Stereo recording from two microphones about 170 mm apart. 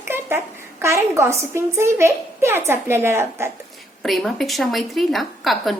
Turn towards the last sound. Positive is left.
turn(degrees=0)  # may be behind; listen again after turning